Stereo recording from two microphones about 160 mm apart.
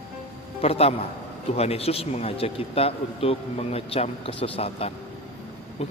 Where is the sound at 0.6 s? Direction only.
40° left (ahead or behind).